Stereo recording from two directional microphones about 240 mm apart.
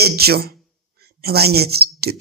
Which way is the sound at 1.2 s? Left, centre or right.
Right.